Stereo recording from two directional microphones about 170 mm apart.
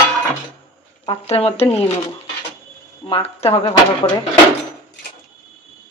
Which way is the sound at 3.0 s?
35° left (ahead or behind).